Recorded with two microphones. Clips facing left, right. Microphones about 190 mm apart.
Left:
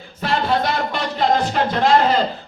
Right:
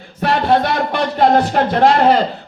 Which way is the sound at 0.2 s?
55° right (ahead or behind).